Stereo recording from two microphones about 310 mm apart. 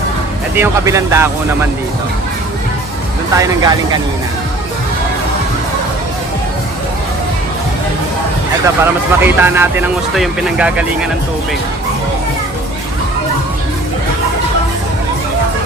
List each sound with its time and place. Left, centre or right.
0.5 s speech: centre
3.3 s speech: centre
8.6 s speech: centre